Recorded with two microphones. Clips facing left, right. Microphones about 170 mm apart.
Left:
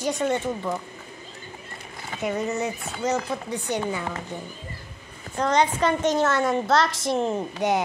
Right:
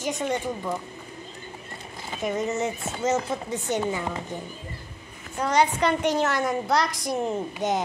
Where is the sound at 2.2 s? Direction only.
20° right (ahead or behind).